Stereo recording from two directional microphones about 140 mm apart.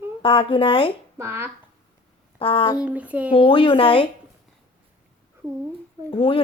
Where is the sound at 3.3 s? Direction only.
40° left (ahead or behind).